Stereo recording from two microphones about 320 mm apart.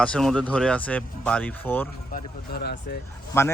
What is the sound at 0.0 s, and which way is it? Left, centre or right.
Speech, centre.